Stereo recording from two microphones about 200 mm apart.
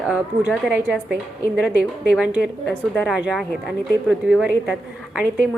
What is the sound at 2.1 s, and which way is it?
A woman's voice, 5° right (ahead or behind).